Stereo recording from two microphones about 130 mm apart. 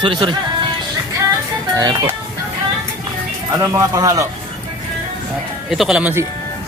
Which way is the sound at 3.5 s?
25° right (ahead or behind).